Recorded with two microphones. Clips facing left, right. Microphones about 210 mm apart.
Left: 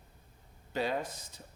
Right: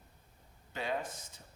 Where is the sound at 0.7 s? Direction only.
35° left (ahead or behind).